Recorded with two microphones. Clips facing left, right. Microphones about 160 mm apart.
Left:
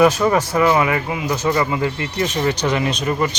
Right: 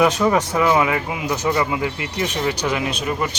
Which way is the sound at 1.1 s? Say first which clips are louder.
Left 2 dB; 15° right (ahead or behind).